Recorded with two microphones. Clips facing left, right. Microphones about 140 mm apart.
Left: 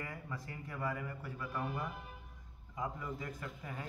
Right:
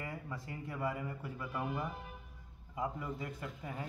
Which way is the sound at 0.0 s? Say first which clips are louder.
Right 1 dB; 20° right (ahead or behind).